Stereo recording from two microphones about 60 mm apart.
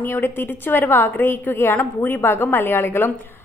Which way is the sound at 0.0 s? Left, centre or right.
Left.